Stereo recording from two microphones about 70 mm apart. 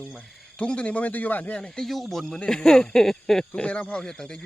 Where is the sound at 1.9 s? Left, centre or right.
Centre.